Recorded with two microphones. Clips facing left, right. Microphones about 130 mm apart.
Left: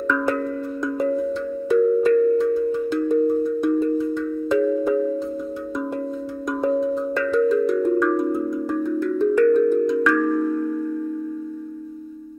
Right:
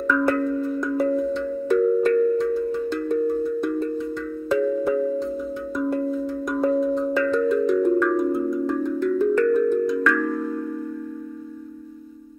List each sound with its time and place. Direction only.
0.9 s singing bowl: centre (ahead or behind)
1.7 s cowbell: 5° left (ahead or behind)
2.5 s wind chime: 10° left (ahead or behind)
3.6 s music: 5° left (ahead or behind)
5.8 s singing bowl: 5° left (ahead or behind)
8.2 s wind chime: centre (ahead or behind)
8.6 s music: 10° left (ahead or behind)
9.2 s music: 5° right (ahead or behind)
9.8 s wind chime: 5° left (ahead or behind)